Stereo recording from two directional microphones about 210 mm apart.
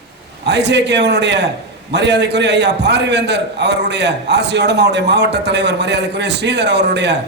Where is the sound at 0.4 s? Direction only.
55° right (ahead or behind).